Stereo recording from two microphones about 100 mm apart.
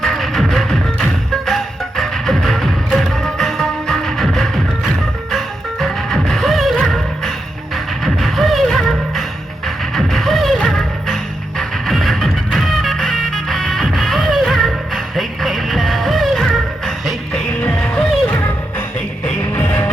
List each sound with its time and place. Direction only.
0.0 s music: centre (ahead or behind)
19.5 s music: 20° left (ahead or behind)